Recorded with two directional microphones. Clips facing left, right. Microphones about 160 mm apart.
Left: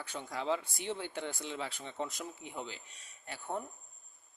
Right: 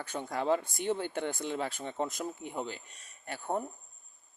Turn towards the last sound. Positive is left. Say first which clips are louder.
# right 5 dB
turn(degrees=-45)  # may be behind; listen again after turning